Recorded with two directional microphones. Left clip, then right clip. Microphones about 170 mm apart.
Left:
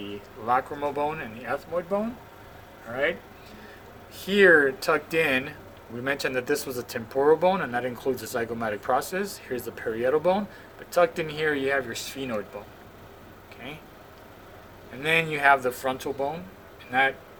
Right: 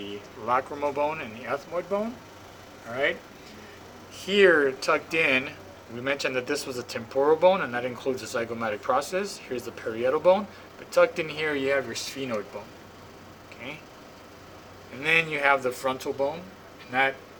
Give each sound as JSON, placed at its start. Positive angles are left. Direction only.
{"t": 0.4, "sound": "speech", "side_deg": 50}
{"t": 4.3, "sound": "speech", "side_deg": 55}
{"t": 15.0, "sound": "speech", "side_deg": 50}